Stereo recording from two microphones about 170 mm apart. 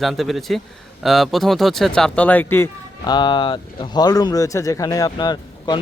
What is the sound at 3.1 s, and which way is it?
Speech, 25° left (ahead or behind).